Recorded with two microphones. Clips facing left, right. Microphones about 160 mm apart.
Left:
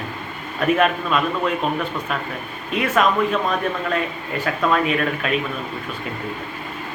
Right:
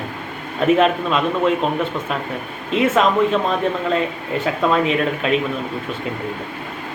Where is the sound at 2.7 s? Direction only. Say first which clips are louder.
Right 3 dB; 25° right (ahead or behind).